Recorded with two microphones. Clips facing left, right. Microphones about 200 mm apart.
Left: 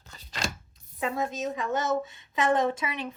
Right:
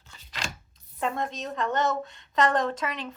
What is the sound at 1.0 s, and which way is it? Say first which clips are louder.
A woman's voice: left 1 dB; 5° left (ahead or behind).